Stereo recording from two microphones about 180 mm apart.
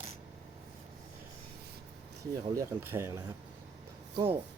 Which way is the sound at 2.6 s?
15° right (ahead or behind).